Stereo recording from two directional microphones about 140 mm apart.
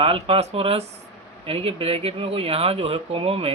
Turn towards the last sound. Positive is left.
turn(degrees=-45)  # may be behind; listen again after turning